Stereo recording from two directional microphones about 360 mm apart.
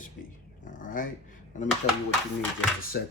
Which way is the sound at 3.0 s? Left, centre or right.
Left.